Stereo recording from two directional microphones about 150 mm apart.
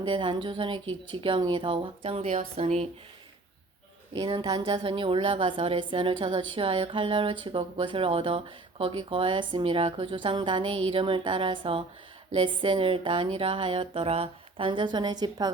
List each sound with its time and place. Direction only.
0.0 s a woman's voice: 35° right (ahead or behind)
4.1 s a woman's voice: 35° right (ahead or behind)